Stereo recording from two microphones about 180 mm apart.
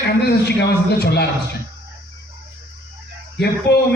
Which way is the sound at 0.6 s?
65° left (ahead or behind).